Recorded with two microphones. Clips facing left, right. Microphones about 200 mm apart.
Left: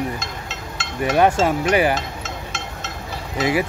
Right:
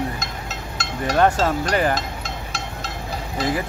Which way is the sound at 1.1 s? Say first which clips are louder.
Left 2 dB; 10° left (ahead or behind).